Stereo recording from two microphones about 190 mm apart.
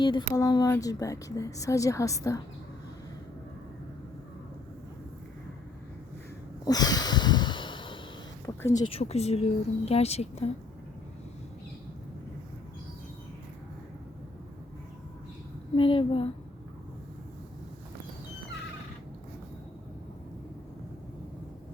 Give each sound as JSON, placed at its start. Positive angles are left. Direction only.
{"t": 0.0, "sound": "a woman's voice", "side_deg": 25}
{"t": 6.7, "sound": "snort", "side_deg": 20}
{"t": 8.5, "sound": "a sound", "side_deg": 20}
{"t": 8.9, "sound": "speech", "side_deg": 35}
{"t": 15.7, "sound": "speech", "side_deg": 30}